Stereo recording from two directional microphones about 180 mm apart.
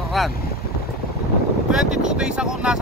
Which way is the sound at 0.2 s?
Centre (ahead or behind).